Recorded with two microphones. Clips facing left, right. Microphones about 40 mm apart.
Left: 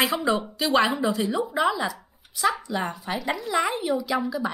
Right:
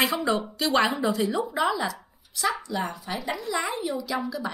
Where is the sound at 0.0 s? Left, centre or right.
Centre.